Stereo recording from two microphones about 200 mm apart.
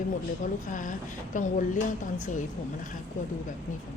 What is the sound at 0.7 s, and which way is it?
A woman's voice, 40° left (ahead or behind).